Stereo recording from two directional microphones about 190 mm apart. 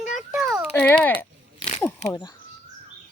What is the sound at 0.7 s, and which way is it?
Speech, 10° left (ahead or behind).